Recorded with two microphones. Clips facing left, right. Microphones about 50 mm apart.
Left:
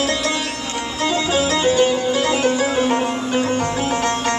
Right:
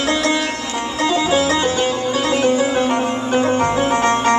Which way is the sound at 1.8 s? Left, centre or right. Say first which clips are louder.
Left 2 dB; centre.